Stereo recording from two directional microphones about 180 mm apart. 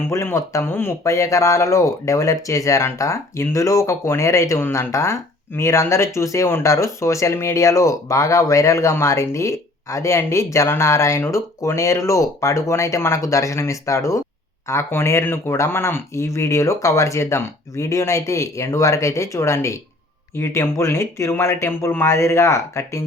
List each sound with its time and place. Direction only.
0.0 s speech: 15° left (ahead or behind)